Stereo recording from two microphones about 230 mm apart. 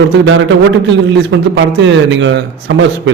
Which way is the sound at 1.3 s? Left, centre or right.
Right.